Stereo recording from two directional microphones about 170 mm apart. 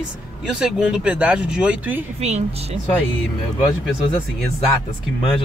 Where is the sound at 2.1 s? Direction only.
40° right (ahead or behind).